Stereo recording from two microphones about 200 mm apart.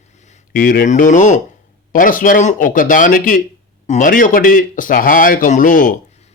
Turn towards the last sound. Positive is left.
turn(degrees=40)  # may be behind; listen again after turning